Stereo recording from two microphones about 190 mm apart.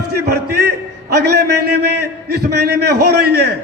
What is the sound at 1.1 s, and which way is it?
A man's voice, 60° right (ahead or behind).